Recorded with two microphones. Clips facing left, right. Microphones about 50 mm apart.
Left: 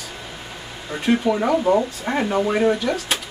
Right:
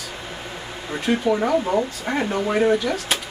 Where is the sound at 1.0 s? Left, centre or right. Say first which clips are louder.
Left 1 dB; centre.